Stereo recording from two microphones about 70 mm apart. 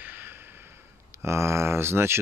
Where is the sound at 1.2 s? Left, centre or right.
Right.